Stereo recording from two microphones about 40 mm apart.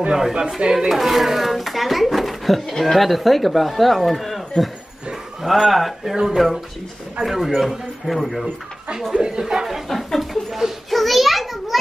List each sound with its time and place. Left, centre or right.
0.1 s speech: centre
0.8 s speech: centre
9.1 s speech: right
9.4 s speech: centre
10.9 s a sound: centre